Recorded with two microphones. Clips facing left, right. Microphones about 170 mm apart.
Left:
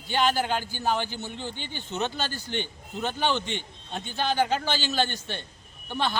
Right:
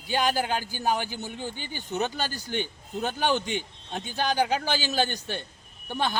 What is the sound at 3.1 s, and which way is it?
Speech, 45° right (ahead or behind).